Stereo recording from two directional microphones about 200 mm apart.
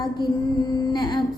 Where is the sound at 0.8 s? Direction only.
20° left (ahead or behind).